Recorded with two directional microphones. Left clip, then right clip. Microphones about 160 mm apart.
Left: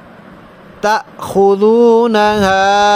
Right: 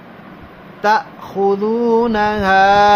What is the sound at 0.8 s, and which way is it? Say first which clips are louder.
Mantra: left 1 dB; 60° left (ahead or behind).